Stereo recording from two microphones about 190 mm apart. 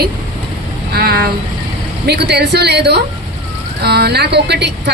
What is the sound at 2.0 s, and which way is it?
A man's voice, 60° right (ahead or behind).